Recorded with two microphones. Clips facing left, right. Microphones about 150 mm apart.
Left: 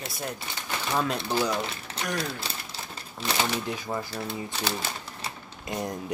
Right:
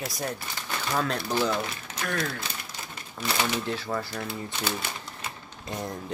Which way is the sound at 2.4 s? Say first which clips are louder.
Left 1 dB; 30° left (ahead or behind).